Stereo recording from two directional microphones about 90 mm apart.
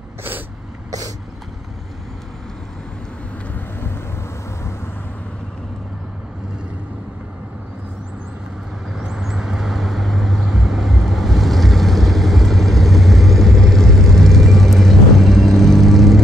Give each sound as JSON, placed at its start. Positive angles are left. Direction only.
{"t": 3.5, "sound": "vehicle", "side_deg": 25}
{"t": 8.9, "sound": "vehicle", "side_deg": -5}